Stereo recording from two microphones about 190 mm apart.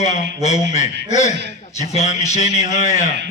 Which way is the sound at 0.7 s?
35° left (ahead or behind).